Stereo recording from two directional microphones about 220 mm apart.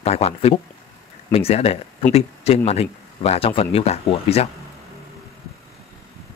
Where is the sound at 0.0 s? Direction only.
30° left (ahead or behind).